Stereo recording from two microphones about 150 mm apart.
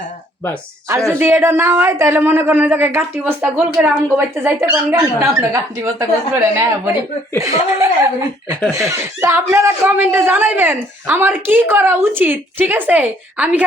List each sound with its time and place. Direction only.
1.2 s speech: 15° right (ahead or behind)
3.4 s a woman's voice: 5° right (ahead or behind)
4.4 s speech: 20° right (ahead or behind)